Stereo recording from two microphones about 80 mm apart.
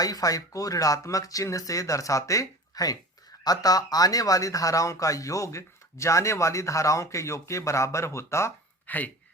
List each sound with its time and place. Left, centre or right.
0.0 s speech: left
8.9 s speech: left